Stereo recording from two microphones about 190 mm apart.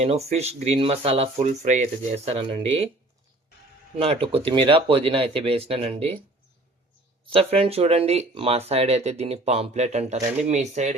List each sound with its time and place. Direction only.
0.0 s speech: 35° right (ahead or behind)
3.9 s speech: 30° right (ahead or behind)
7.3 s speech: 30° right (ahead or behind)